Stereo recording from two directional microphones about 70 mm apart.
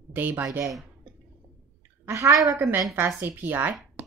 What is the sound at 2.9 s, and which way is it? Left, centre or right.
Speech, right.